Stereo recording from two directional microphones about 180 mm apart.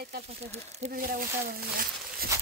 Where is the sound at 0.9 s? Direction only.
50° right (ahead or behind).